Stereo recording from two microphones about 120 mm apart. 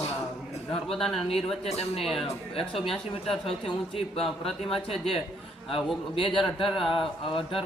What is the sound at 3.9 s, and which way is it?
Speech, 55° left (ahead or behind).